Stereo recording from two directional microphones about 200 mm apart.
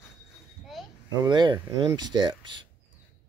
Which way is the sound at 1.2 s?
20° right (ahead or behind).